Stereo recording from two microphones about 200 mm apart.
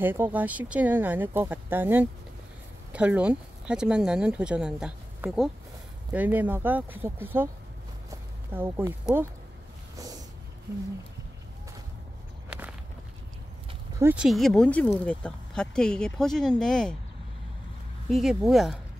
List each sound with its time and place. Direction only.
0.0 s speech: 10° right (ahead or behind)
9.9 s a sound: 20° right (ahead or behind)
12.4 s walk: 5° right (ahead or behind)
13.9 s speech: 10° right (ahead or behind)
18.1 s speech: centre (ahead or behind)